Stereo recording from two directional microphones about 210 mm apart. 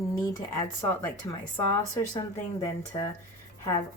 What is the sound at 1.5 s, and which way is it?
Speech, 15° left (ahead or behind).